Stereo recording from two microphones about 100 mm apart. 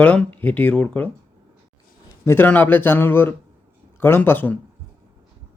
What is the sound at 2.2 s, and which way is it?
Speech, 20° left (ahead or behind).